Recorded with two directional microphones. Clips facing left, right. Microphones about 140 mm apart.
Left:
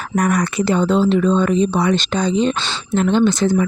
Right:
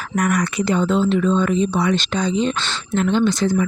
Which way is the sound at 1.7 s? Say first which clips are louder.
Left 2 dB; 50° left (ahead or behind).